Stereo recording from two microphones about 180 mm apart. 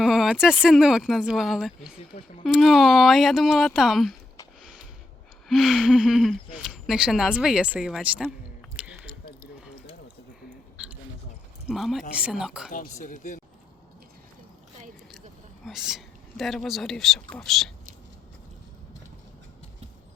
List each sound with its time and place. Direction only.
0.0 s a sound: 5° right (ahead or behind)
0.6 s speech: 5° right (ahead or behind)
4.6 s a sound: 5° right (ahead or behind)
5.5 s speech: centre (ahead or behind)
11.7 s speech: centre (ahead or behind)
12.7 s speech: 50° left (ahead or behind)
15.6 s speech: centre (ahead or behind)